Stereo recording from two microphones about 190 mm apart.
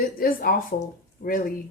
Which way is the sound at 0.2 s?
50° left (ahead or behind).